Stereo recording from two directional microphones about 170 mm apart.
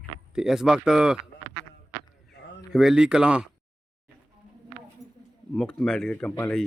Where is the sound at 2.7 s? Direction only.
Centre (ahead or behind).